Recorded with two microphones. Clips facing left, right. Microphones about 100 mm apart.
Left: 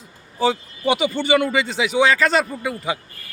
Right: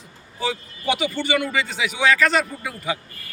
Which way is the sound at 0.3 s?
30° left (ahead or behind).